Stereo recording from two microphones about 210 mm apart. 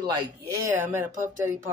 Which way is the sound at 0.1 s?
15° right (ahead or behind).